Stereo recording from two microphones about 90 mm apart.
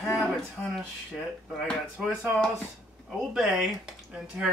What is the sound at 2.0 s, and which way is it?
Speech, 5° right (ahead or behind).